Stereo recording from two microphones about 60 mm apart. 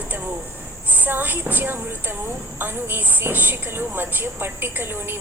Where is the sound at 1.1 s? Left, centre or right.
Right.